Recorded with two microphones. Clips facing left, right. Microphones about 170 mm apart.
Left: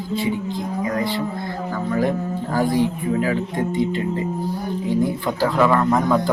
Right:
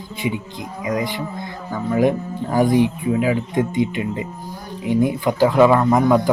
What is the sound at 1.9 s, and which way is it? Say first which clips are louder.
Speech: right 4 dB; 15° right (ahead or behind).